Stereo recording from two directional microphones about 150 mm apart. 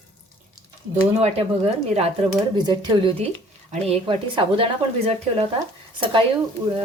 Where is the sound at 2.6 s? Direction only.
30° right (ahead or behind).